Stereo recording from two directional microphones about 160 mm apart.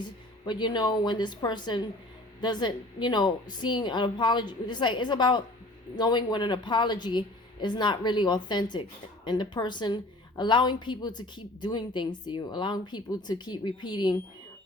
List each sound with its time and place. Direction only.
0.0 s a woman's voice: 30° left (ahead or behind)